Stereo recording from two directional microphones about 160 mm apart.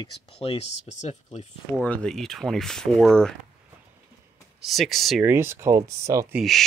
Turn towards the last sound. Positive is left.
turn(degrees=0)  # may be behind; listen again after turning